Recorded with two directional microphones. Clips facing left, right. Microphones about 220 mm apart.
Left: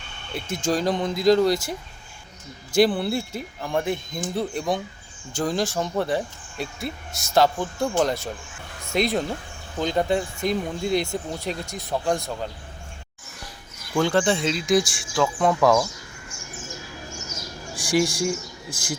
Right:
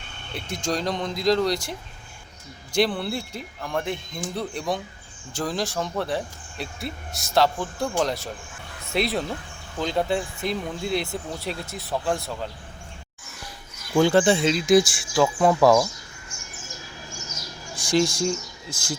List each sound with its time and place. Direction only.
0.3 s speech: centre (ahead or behind)
2.7 s speech: 5° left (ahead or behind)
10.4 s speech: 45° left (ahead or behind)
10.9 s speech: centre (ahead or behind)
13.9 s speech: 5° right (ahead or behind)
17.7 s speech: 10° left (ahead or behind)